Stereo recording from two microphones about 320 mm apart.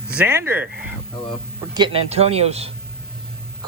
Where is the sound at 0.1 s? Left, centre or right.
Centre.